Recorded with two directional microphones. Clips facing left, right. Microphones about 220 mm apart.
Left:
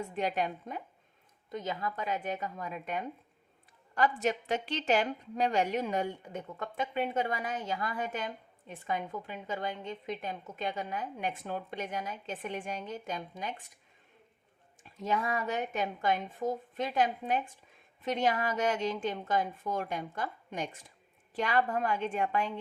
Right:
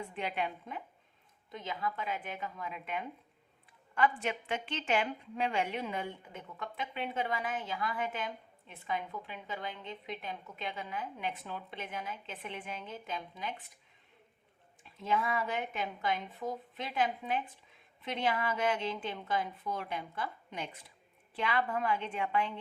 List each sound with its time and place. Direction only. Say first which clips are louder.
0.0 s a woman's voice: left 4 dB; 40° left (ahead or behind)
14.8 s a woman's voice: left 1 dB; 45° left (ahead or behind)